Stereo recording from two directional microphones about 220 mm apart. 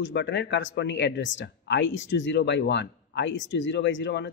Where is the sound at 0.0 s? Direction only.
55° left (ahead or behind).